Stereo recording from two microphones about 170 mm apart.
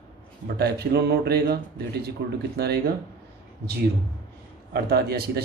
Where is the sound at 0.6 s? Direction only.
70° right (ahead or behind).